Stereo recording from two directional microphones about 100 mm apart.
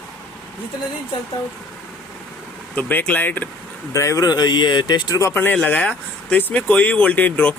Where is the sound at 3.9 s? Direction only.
30° left (ahead or behind).